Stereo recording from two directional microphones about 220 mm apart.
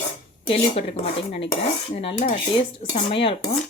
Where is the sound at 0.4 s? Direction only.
25° left (ahead or behind).